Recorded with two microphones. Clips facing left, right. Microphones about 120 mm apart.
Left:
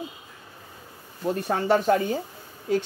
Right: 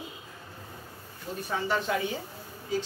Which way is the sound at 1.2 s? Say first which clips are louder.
Left 8 dB; 50° left (ahead or behind).